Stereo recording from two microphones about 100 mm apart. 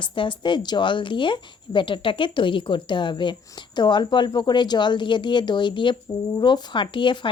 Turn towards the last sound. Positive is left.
turn(degrees=55)  # may be behind; listen again after turning